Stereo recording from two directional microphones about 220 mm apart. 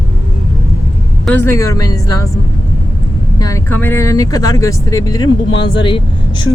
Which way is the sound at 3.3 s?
15° left (ahead or behind).